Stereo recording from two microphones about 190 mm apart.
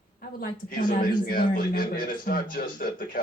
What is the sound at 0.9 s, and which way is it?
Speech, 50° left (ahead or behind).